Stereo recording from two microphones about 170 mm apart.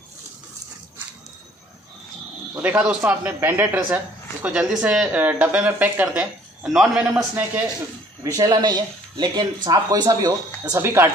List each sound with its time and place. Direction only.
2.5 s speech: 10° right (ahead or behind)
8.2 s speech: 20° right (ahead or behind)